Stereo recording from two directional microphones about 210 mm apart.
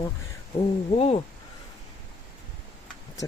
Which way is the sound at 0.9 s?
30° left (ahead or behind).